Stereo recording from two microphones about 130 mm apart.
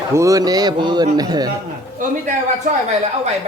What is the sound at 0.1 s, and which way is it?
A man's voice, 25° right (ahead or behind).